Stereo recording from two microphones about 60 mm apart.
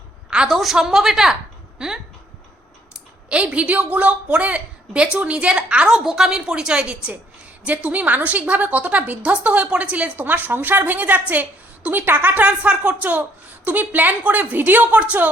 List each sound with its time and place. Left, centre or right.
0.3 s a sound: centre
0.5 s a woman's voice: centre
3.2 s a woman's voice: centre
6.0 s a woman's voice: centre; by 15.0 s right